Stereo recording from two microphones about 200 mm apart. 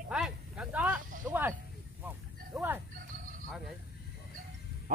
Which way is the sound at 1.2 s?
10° right (ahead or behind).